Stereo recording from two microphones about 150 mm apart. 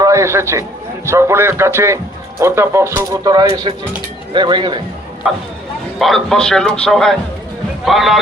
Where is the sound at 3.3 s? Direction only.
30° right (ahead or behind).